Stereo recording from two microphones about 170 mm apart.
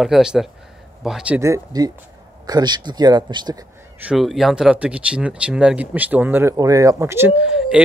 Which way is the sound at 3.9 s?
5° right (ahead or behind).